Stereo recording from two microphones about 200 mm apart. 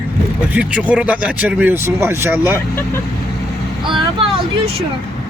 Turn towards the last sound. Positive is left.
turn(degrees=-25)  # may be behind; listen again after turning